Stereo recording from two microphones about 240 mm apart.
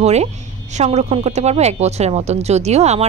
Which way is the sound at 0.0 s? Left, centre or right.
Right.